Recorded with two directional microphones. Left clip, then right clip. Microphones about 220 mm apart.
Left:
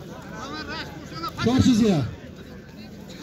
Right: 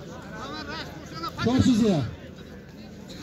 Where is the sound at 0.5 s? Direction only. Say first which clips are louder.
Left 3 dB; 20° right (ahead or behind).